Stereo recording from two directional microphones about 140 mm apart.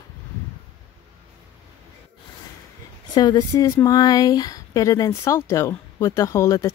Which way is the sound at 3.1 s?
30° left (ahead or behind).